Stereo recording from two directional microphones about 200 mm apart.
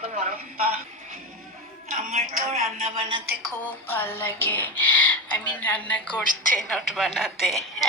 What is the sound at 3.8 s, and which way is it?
A woman's voice, 10° left (ahead or behind).